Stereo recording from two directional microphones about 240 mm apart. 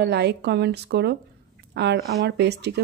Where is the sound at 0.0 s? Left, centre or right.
Right.